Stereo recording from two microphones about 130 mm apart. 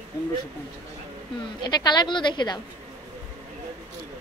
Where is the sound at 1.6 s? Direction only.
35° left (ahead or behind).